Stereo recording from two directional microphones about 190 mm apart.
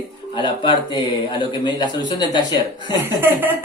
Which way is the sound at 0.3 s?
25° left (ahead or behind).